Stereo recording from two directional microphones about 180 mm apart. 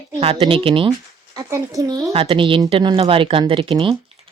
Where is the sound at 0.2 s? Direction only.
30° right (ahead or behind).